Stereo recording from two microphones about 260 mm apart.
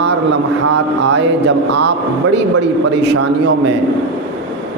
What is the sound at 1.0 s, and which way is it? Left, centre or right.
A man's voice, right.